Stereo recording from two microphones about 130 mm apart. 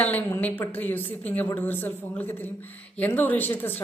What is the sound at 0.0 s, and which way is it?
A woman's voice, 15° left (ahead or behind).